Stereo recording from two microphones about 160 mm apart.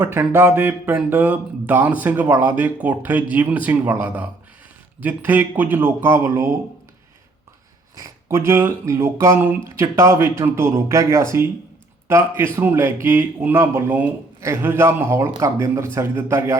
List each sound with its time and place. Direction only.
0.0 s speech: 15° right (ahead or behind)
7.9 s speech: 15° right (ahead or behind)